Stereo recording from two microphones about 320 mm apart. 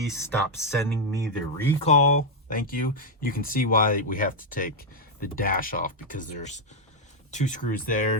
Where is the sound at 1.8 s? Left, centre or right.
Left.